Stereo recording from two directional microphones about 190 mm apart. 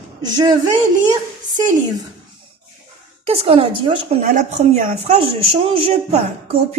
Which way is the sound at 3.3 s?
30° right (ahead or behind).